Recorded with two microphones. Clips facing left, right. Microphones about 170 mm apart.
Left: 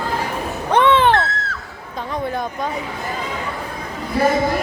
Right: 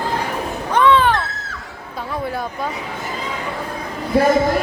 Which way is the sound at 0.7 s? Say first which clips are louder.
Left 1 dB; 25° left (ahead or behind).